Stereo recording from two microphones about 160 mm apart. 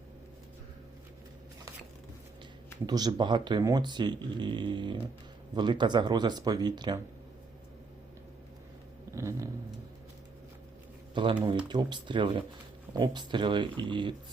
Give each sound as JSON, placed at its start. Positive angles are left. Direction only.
{"t": 2.8, "sound": "speech", "side_deg": -25}
{"t": 9.1, "sound": "vehicle", "side_deg": -20}
{"t": 11.1, "sound": "speech", "side_deg": -30}